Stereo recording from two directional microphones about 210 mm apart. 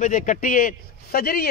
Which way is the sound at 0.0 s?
35° left (ahead or behind).